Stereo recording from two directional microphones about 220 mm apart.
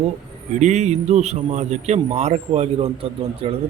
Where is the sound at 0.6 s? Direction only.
30° right (ahead or behind).